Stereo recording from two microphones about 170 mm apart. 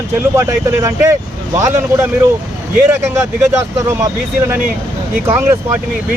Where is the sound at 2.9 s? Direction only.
15° right (ahead or behind).